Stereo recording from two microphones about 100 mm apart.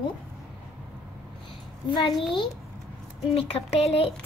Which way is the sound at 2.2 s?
60° left (ahead or behind).